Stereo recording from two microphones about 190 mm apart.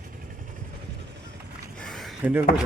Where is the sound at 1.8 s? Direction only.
Centre (ahead or behind).